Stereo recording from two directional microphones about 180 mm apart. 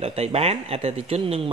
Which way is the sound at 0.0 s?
35° right (ahead or behind).